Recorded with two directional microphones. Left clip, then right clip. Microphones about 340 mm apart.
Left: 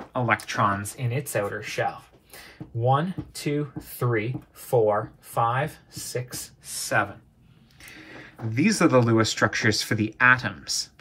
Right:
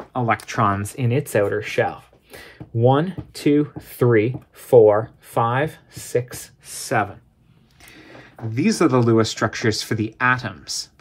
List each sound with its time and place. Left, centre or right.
0.1 s speech: centre
7.8 s speech: centre